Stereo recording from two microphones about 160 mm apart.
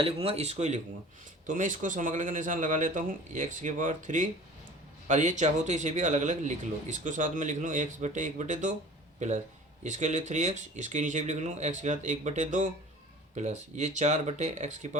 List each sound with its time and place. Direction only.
0.0 s speech: 35° right (ahead or behind)
1.5 s speech: 55° right (ahead or behind)